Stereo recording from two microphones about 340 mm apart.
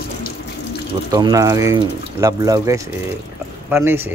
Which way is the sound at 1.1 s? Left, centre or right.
Centre.